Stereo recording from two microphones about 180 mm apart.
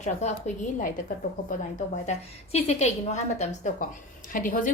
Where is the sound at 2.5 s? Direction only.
35° left (ahead or behind).